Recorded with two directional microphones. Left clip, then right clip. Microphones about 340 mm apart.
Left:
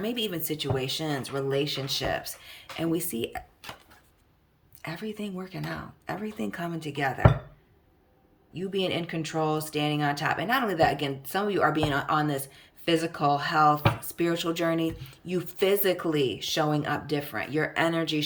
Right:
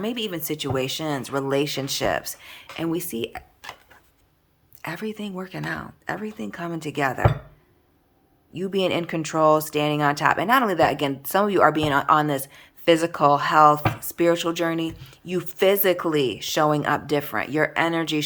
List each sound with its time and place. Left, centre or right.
0.0 s speech: centre
4.8 s speech: centre
8.5 s speech: centre